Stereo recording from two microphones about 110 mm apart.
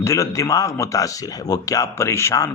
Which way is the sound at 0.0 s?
30° left (ahead or behind).